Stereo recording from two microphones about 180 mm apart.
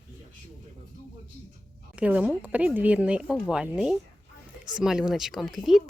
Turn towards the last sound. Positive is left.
turn(degrees=0)  # may be behind; listen again after turning